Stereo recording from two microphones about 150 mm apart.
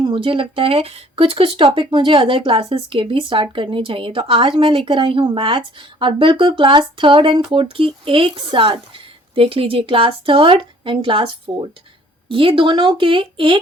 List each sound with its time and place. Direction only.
0.0 s speech: 35° right (ahead or behind)